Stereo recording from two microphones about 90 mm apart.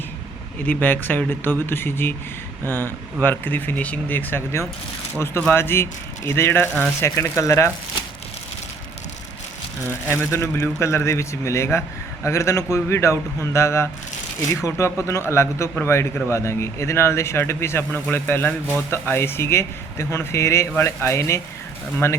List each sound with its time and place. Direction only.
0.6 s speech: 20° left (ahead or behind)
10.1 s speech: 30° left (ahead or behind)